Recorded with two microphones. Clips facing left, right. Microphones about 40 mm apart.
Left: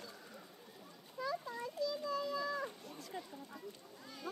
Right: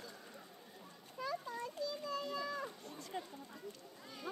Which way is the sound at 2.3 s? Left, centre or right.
Centre.